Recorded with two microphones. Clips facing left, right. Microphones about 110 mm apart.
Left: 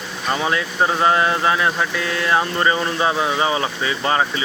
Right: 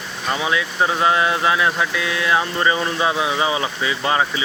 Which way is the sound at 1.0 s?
35° left (ahead or behind).